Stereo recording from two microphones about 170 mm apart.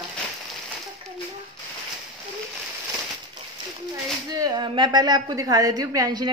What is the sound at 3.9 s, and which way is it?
A woman's voice, 20° right (ahead or behind).